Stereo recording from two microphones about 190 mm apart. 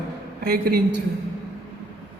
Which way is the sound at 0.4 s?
55° right (ahead or behind).